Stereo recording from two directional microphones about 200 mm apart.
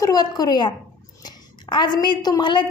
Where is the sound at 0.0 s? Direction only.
20° left (ahead or behind).